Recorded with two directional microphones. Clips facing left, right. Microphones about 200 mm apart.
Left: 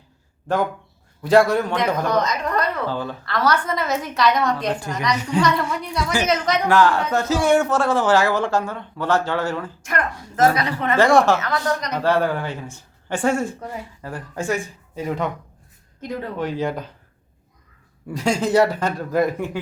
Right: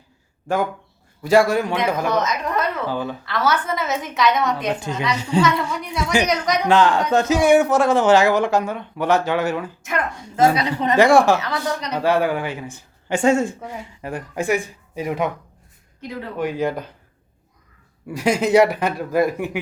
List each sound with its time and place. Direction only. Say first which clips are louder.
1.2 s a woman's voice: even; 5° right (ahead or behind)
2.6 s speech: right 1 dB; 15° right (ahead or behind)
3.2 s a woman's voice: left 1 dB; centre (ahead or behind)
4.6 s a man's voice: right 1 dB; 20° right (ahead or behind)
5.4 s a woman's voice: right 2 dB; centre (ahead or behind)
6.0 s a man's voice: right 2 dB; 20° right (ahead or behind)
16.4 s speech: right 3 dB; 15° right (ahead or behind)
18.1 s speech: right 2 dB; 15° right (ahead or behind)